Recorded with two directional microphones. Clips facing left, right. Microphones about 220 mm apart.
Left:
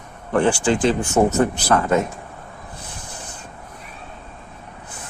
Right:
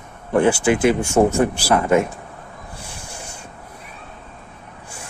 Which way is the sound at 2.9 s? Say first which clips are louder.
Right 1 dB; 10° right (ahead or behind).